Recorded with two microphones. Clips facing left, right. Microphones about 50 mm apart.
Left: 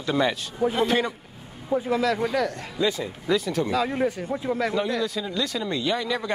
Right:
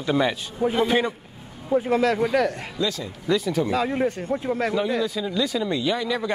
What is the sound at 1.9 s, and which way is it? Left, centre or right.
Speech, right.